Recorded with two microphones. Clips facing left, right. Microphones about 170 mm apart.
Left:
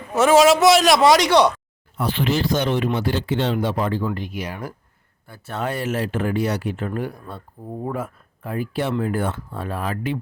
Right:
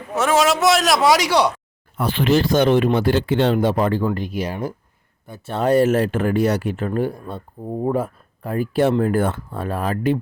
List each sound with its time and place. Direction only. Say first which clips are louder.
0.2 s a man's voice: left 4 dB; centre (ahead or behind)
2.0 s speech: right 4 dB; 55° right (ahead or behind); by 5.5 s 20° right (ahead or behind)
5.5 s speech: right 9 dB; 40° right (ahead or behind)